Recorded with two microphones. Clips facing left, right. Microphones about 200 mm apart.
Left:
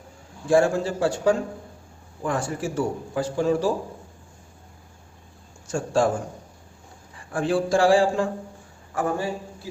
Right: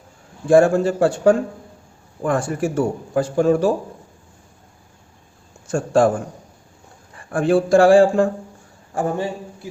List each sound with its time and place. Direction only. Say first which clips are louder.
0.4 s speech: right 6 dB; 50° right (ahead or behind)
5.6 s a man's voice: right 6 dB; 55° right (ahead or behind)
7.3 s speech: right 7 dB; 55° right (ahead or behind)
8.9 s a man's voice: right 3 dB; 25° right (ahead or behind)